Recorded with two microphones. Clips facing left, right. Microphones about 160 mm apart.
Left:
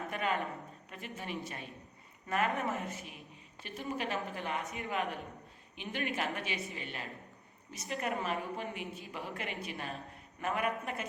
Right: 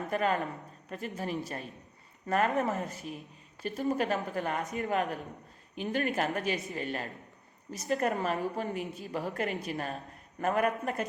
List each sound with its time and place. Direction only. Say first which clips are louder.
0.1 s a woman's voice: right 6 dB; 40° right (ahead or behind)